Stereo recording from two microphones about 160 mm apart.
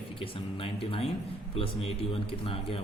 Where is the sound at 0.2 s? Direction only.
35° left (ahead or behind).